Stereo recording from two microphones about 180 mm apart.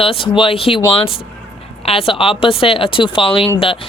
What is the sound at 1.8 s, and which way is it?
Speech, 30° left (ahead or behind).